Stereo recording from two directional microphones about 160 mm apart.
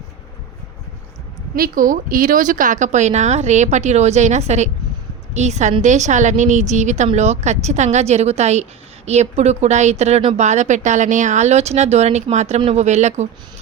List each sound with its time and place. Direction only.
1.5 s speech: 65° right (ahead or behind); by 13.2 s 45° right (ahead or behind)